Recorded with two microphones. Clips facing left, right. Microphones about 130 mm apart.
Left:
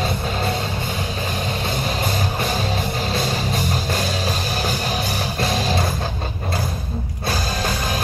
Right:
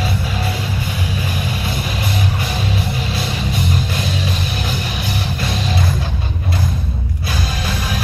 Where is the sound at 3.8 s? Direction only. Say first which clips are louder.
Even; 40° left (ahead or behind).